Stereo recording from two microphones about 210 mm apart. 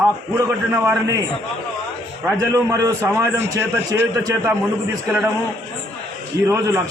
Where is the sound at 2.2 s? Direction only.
10° right (ahead or behind).